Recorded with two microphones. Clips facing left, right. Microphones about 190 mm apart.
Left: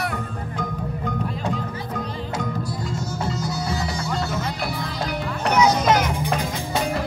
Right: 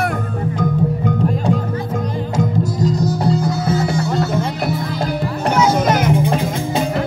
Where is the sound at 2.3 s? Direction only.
40° right (ahead or behind).